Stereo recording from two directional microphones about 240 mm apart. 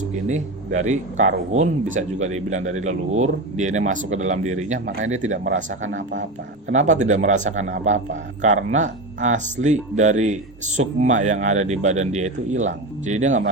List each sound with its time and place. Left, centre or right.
0.0 s speech: right
5.8 s speech: right
6.7 s speech: right